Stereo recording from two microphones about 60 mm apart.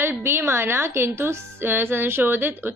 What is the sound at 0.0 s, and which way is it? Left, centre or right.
A woman's voice, right.